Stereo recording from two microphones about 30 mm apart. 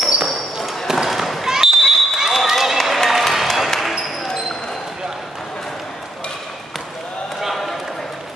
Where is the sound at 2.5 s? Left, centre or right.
Centre.